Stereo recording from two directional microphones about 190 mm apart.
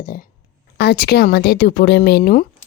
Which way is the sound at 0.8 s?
55° left (ahead or behind).